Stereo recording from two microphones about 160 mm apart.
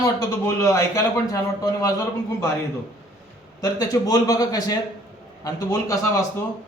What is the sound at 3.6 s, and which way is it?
A man's voice, 20° left (ahead or behind).